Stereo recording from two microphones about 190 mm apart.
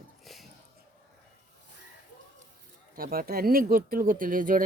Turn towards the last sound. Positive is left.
turn(degrees=-45)  # may be behind; listen again after turning